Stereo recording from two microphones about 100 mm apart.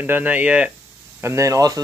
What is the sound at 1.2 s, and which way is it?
Speech, 30° right (ahead or behind).